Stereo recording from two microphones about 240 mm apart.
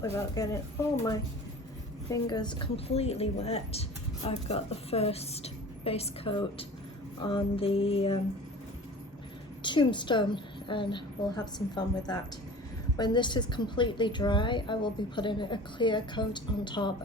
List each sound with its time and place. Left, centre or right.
0.4 s speech: centre
2.0 s a woman's voice: centre
9.6 s a woman's voice: centre